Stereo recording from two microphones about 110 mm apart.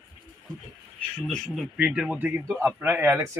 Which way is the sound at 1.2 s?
5° left (ahead or behind).